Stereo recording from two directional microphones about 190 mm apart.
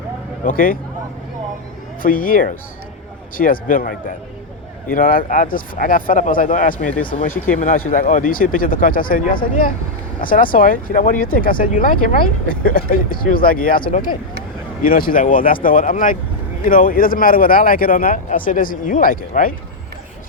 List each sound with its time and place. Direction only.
0.4 s speech: 45° left (ahead or behind)
2.0 s speech: 45° left (ahead or behind)
4.9 s speech: 45° left (ahead or behind)
7.3 s speech: 10° left (ahead or behind)
7.9 s speech: 45° left (ahead or behind)